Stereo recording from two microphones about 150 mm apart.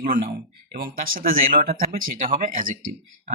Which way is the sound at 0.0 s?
70° right (ahead or behind).